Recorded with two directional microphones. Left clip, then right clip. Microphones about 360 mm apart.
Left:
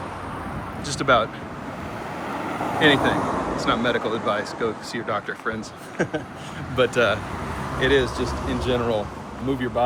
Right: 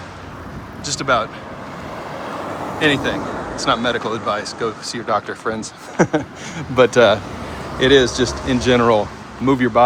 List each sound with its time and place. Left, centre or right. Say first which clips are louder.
0.9 s speech: right 2 dB; centre
2.7 s speech: even; centre